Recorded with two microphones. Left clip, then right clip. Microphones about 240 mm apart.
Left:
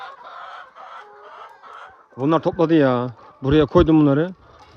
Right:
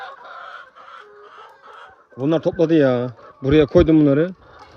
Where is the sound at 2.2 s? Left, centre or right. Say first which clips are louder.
Even; centre.